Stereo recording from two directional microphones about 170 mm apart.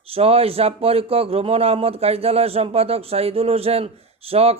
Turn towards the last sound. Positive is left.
turn(degrees=-35)  # may be behind; listen again after turning